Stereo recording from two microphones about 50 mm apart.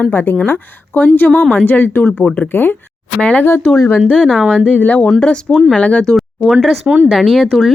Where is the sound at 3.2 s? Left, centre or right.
Left.